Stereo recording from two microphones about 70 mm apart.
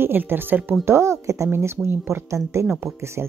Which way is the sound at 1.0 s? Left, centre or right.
Right.